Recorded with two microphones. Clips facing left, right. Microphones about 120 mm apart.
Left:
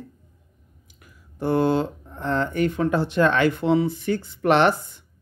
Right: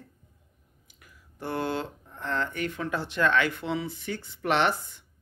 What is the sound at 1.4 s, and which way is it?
Mantra, 30° left (ahead or behind).